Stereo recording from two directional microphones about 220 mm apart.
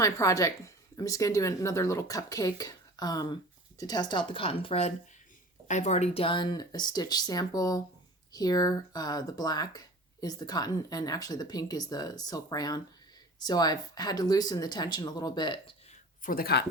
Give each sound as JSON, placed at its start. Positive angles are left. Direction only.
{"t": 0.0, "sound": "speech", "side_deg": 15}
{"t": 16.2, "sound": "speech", "side_deg": 40}